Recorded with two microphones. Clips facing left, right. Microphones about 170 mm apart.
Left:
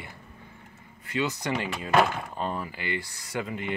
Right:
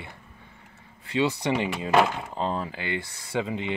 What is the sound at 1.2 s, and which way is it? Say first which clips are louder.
Speech: right 4 dB; 30° right (ahead or behind).